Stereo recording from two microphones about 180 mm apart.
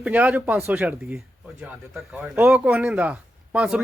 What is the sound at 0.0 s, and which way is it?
Speech, 10° right (ahead or behind).